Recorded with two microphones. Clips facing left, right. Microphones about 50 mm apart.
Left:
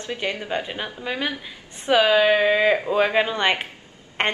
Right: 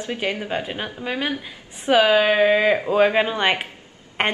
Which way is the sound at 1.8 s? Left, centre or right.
Centre.